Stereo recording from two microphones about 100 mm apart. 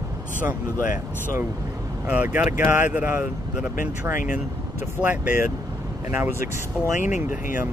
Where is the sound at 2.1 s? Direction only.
15° right (ahead or behind).